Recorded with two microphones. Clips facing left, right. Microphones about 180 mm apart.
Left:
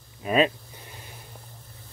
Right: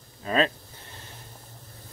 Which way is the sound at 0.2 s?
15° left (ahead or behind).